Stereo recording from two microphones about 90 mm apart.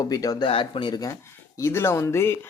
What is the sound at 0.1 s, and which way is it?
Speech, 45° left (ahead or behind).